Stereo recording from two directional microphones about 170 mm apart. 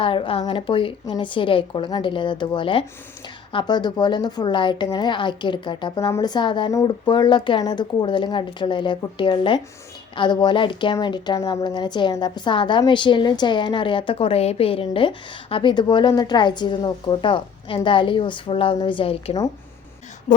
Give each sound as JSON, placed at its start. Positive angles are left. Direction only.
{"t": 0.0, "sound": "a woman's voice", "side_deg": 30}